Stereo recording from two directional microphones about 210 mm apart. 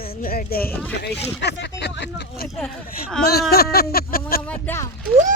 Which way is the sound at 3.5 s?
50° left (ahead or behind).